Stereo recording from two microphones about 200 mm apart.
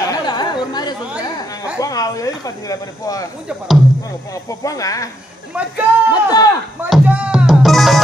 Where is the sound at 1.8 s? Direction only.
15° left (ahead or behind).